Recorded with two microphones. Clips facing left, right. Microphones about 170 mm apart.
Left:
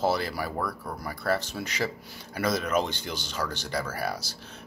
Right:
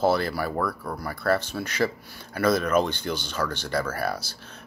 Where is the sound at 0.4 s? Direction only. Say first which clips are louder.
Right 4 dB; 15° left (ahead or behind).